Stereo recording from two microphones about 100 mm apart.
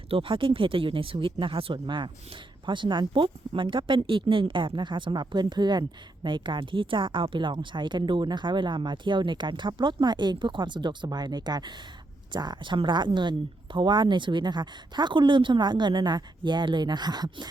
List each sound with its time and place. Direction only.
0.1 s a woman's voice: 60° right (ahead or behind); by 17.5 s 45° right (ahead or behind)